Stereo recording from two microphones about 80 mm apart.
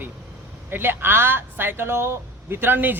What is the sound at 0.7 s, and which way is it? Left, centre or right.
Speech, right.